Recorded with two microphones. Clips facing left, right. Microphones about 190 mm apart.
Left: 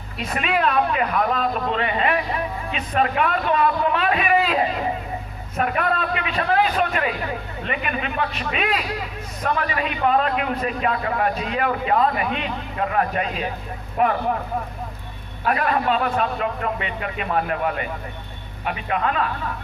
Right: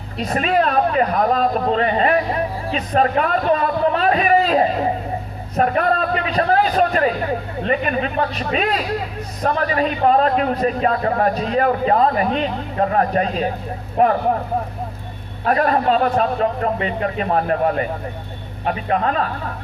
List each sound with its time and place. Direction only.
0.2 s a man's voice: 35° right (ahead or behind)
15.4 s a man's voice: 40° right (ahead or behind)